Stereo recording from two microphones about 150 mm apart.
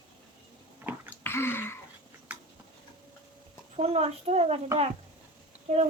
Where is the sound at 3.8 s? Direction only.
45° right (ahead or behind).